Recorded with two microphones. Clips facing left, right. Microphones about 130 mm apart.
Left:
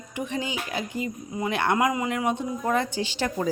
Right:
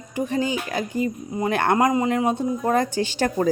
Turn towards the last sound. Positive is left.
turn(degrees=-50)  # may be behind; listen again after turning